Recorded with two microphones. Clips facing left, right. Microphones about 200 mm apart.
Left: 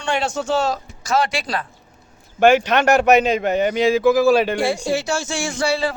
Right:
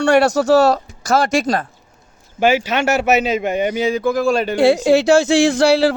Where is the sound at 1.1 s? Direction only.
45° right (ahead or behind).